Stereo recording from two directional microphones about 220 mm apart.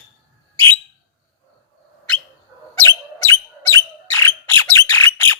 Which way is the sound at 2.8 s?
10° left (ahead or behind).